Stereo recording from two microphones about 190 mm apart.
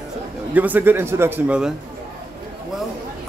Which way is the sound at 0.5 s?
10° right (ahead or behind).